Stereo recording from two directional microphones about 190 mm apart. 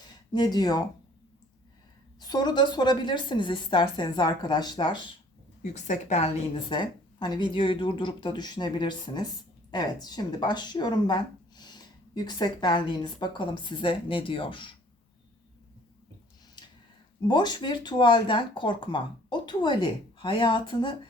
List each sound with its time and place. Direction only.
0.3 s speech: 20° left (ahead or behind)
2.2 s speech: 20° left (ahead or behind)
5.6 s speech: 40° left (ahead or behind)
17.2 s speech: 20° left (ahead or behind)